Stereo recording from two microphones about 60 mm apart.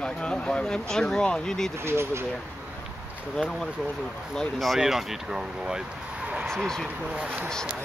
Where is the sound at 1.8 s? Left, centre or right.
Right.